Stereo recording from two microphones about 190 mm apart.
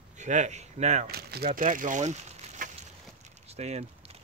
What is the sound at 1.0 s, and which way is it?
Speech, 55° right (ahead or behind).